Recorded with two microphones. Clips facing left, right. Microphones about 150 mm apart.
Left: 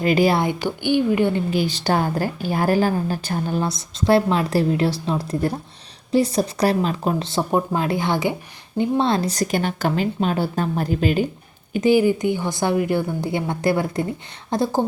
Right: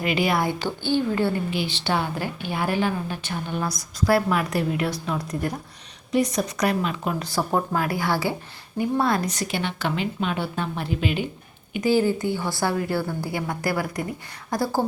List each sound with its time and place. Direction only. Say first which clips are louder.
0.0 s a woman's voice: left 6 dB; 40° left (ahead or behind)
0.3 s speech: left 3 dB; 15° left (ahead or behind)
1.5 s a woman's voice: left 5 dB; 40° left (ahead or behind); by 9.3 s 25° left (ahead or behind)
9.3 s a woman's voice: left 6 dB; 40° left (ahead or behind)
11.8 s a woman's voice: left 4 dB; 15° left (ahead or behind)